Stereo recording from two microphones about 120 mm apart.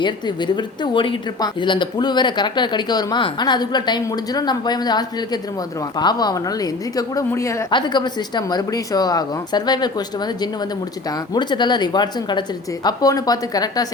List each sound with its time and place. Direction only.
0.0 s a woman's voice: 40° left (ahead or behind)
7.7 s speech: 40° left (ahead or behind)
11.3 s speech: 40° left (ahead or behind)